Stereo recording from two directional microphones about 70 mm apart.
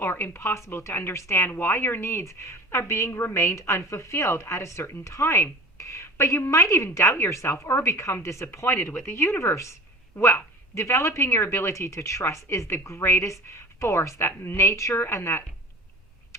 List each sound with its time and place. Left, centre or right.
0.0 s a woman's voice: left